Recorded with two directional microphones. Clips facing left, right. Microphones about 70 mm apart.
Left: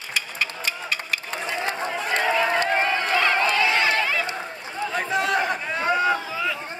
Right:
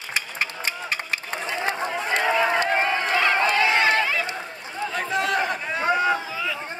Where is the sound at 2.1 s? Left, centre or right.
Centre.